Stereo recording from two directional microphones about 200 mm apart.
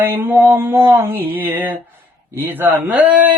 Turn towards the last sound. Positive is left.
turn(degrees=-5)  # may be behind; listen again after turning